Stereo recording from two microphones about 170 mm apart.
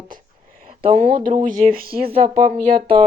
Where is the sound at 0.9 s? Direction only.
50° right (ahead or behind).